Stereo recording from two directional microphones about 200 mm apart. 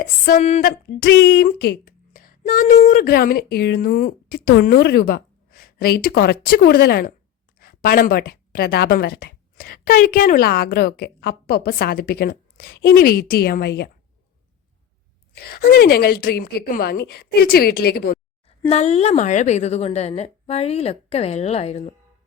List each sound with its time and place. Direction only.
0.0 s speech: 40° left (ahead or behind)
15.4 s speech: 50° left (ahead or behind)
18.4 s speech: 30° left (ahead or behind)